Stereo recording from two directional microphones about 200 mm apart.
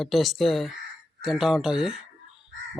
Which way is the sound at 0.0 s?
Centre (ahead or behind).